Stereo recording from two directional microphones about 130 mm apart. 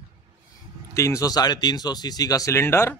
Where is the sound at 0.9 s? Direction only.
25° left (ahead or behind).